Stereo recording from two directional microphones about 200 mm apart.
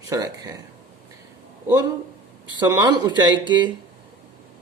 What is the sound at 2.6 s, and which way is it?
Speech, 20° right (ahead or behind).